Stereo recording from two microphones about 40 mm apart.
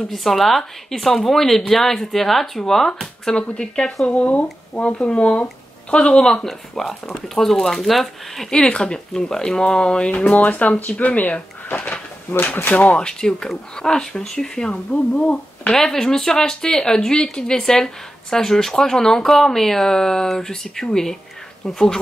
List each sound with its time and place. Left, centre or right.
0.1 s speech: centre
3.5 s speech: left
4.1 s speech: left
4.9 s speech: left
6.2 s a woman's voice: centre
8.6 s a woman's voice: left
10.2 s speech: left
12.9 s a woman's voice: centre
14.7 s speech: left
15.7 s a woman's voice: centre